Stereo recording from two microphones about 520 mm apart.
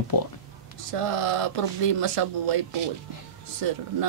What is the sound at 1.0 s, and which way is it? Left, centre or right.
Speech, right.